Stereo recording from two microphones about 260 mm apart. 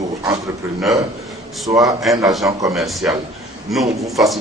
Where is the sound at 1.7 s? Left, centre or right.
Centre.